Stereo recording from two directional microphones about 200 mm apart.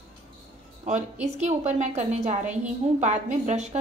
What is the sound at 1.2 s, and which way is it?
A woman's voice, 35° right (ahead or behind).